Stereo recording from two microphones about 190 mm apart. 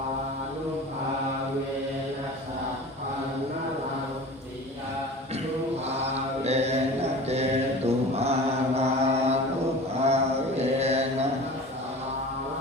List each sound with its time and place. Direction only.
6.4 s mantra: 35° right (ahead or behind)